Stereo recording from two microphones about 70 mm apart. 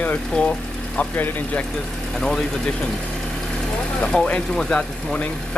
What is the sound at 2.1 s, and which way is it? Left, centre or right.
Speech, centre.